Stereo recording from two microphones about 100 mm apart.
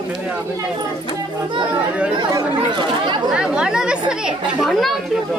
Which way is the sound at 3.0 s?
50° right (ahead or behind).